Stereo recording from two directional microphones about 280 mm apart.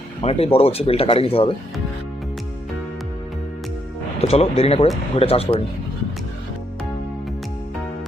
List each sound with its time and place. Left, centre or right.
0.2 s speech: left
4.2 s speech: left